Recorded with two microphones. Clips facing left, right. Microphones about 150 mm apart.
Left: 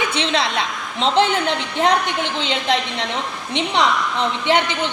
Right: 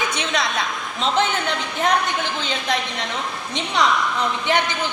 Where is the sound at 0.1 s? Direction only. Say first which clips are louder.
Left 3 dB; 30° left (ahead or behind).